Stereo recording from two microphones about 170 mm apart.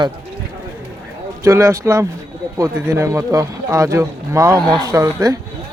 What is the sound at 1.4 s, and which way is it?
Speech, 15° right (ahead or behind).